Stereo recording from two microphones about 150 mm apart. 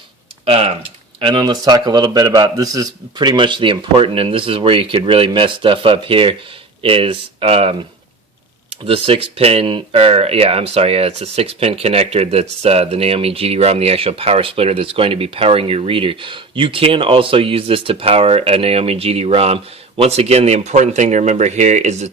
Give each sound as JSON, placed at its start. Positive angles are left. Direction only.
{"t": 0.4, "sound": "speech", "side_deg": -40}
{"t": 1.2, "sound": "speech", "side_deg": -30}
{"t": 8.9, "sound": "speech", "side_deg": -40}